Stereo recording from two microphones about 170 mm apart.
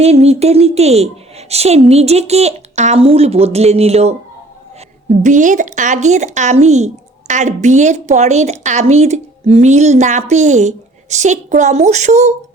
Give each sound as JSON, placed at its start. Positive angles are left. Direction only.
{"t": 0.0, "sound": "a woman's voice", "side_deg": -40}